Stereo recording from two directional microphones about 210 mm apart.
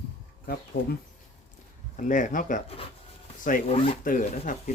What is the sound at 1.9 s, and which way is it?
Speech, 35° left (ahead or behind).